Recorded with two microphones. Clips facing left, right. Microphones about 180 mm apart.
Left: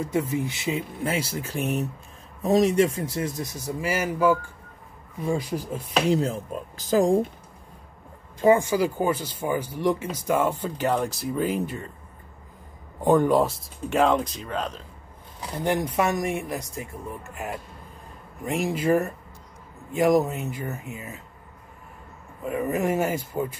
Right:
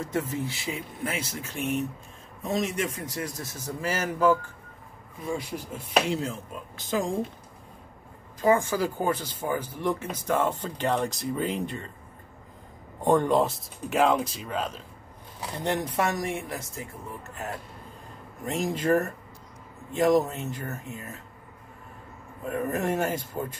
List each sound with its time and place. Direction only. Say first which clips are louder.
0.0 s a man's voice: left 4 dB; 10° left (ahead or behind)
5.2 s speech: left 5 dB; 40° left (ahead or behind)
8.4 s speech: left 4 dB; 20° left (ahead or behind); by 11.9 s 5° left (ahead or behind)
13.0 s speech: left 3 dB; 5° left (ahead or behind)
15.5 s speech: left 4 dB; 10° left (ahead or behind)
22.4 s speech: left 3 dB; 10° left (ahead or behind)